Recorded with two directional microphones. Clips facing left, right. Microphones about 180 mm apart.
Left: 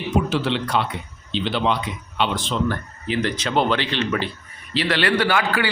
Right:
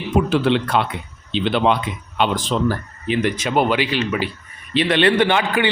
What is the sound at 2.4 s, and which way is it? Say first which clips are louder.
Speech: right 3 dB; 40° right (ahead or behind).